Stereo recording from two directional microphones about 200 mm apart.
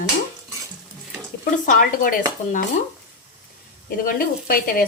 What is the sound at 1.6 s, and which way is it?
Speech, 40° left (ahead or behind).